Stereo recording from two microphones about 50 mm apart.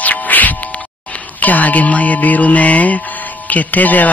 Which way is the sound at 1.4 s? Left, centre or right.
Left.